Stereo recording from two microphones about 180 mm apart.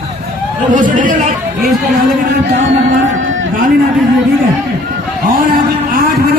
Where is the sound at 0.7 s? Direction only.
45° right (ahead or behind).